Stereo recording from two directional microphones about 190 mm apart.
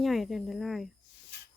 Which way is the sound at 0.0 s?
Centre (ahead or behind).